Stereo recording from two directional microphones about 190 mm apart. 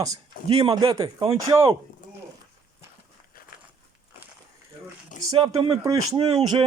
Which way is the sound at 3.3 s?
50° left (ahead or behind).